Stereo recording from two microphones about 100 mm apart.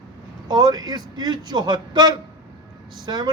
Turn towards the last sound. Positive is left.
turn(degrees=-45)  # may be behind; listen again after turning